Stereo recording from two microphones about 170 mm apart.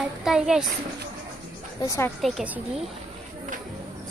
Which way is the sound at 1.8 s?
20° left (ahead or behind).